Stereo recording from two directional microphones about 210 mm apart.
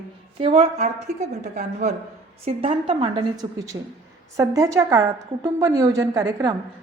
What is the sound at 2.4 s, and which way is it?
A woman's voice, 25° right (ahead or behind).